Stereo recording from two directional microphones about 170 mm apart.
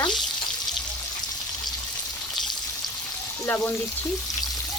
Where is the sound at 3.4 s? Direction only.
10° left (ahead or behind).